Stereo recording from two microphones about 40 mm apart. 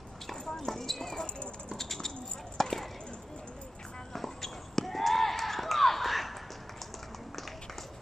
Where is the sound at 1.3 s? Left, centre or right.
Left.